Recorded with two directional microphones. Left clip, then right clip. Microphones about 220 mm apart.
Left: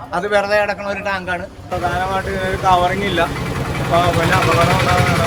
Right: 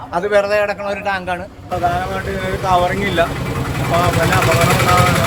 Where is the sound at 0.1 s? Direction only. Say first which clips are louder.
Right 1 dB; centre (ahead or behind); by 1.4 s 20° right (ahead or behind).